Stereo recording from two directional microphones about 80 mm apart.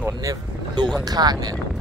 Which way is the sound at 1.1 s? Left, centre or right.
Right.